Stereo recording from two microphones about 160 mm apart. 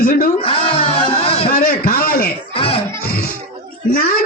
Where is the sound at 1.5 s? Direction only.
65° left (ahead or behind).